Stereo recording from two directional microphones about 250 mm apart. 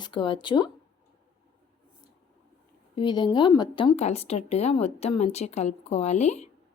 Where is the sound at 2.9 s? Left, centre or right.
Centre.